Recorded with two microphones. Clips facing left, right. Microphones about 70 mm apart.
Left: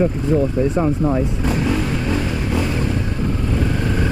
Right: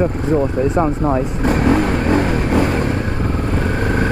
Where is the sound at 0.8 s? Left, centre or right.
Right.